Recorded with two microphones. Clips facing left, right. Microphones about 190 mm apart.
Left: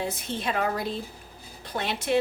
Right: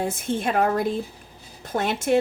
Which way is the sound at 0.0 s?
50° right (ahead or behind).